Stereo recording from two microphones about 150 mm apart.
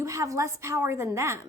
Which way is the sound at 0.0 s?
20° right (ahead or behind).